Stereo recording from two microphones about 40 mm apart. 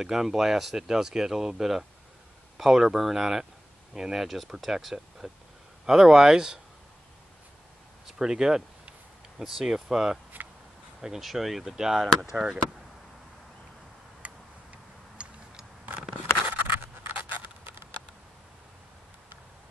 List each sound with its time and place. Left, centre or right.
0.0 s speech: centre
4.3 s speech: centre
8.1 s speech: centre
10.3 s a sound: right
11.0 s speech: centre
14.2 s tick-tock: right
16.4 s writing: right